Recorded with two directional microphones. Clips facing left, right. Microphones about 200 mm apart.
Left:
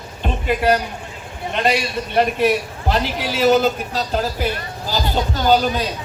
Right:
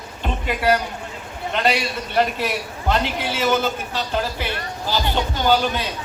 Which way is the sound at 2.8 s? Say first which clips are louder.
Right 1 dB; 35° left (ahead or behind).